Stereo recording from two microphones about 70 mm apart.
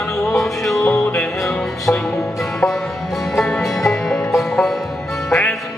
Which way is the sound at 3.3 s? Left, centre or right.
Centre.